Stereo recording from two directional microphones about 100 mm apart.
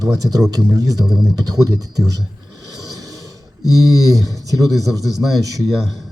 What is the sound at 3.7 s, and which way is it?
Speech, 35° right (ahead or behind).